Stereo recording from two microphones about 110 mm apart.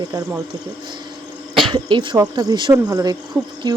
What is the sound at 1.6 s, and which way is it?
Speech, 45° right (ahead or behind).